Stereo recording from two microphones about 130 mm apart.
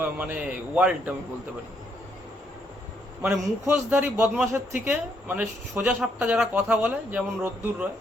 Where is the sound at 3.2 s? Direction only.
15° right (ahead or behind).